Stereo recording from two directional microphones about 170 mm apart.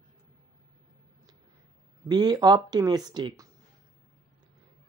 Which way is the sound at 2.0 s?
25° right (ahead or behind).